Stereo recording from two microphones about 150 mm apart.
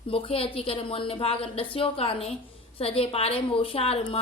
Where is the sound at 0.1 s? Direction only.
40° left (ahead or behind).